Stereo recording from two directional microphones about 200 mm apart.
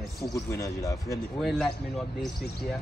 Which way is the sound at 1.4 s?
Centre (ahead or behind).